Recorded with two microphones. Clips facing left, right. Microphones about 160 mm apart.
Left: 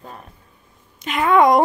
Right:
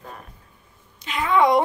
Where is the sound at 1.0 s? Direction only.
55° left (ahead or behind).